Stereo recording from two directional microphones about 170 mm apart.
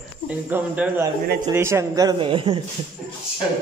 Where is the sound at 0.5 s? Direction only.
10° right (ahead or behind); by 2.5 s 30° right (ahead or behind).